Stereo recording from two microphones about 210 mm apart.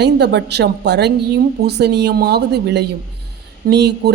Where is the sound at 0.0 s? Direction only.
55° right (ahead or behind).